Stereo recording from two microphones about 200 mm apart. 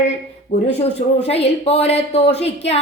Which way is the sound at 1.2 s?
30° left (ahead or behind).